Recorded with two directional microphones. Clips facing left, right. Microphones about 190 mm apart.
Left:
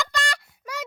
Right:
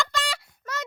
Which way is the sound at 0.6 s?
10° left (ahead or behind).